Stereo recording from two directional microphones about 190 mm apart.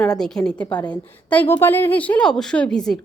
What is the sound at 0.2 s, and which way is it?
A woman's voice, 5° left (ahead or behind).